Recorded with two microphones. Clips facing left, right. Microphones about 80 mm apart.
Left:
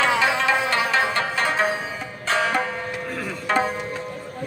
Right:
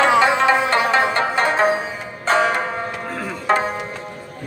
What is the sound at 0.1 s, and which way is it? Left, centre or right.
Music, right.